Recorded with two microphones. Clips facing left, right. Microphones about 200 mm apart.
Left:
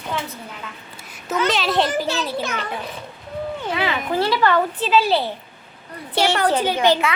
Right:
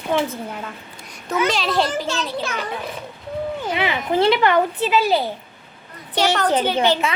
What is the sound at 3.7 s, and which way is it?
A child's voice, 20° right (ahead or behind).